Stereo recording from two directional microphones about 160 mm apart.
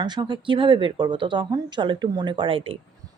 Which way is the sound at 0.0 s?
25° right (ahead or behind).